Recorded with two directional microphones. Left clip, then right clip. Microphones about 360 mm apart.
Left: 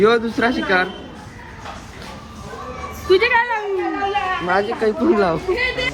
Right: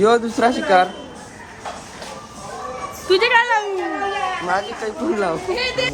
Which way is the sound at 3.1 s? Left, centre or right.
Centre.